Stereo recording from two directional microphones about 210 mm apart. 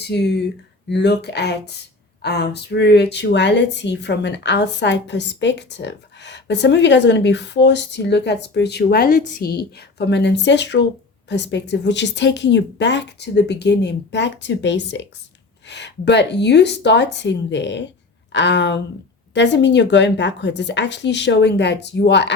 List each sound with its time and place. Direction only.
0.1 s speech: 50° left (ahead or behind)